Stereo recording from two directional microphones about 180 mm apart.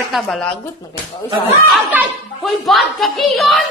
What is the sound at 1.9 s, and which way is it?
Speech, centre (ahead or behind).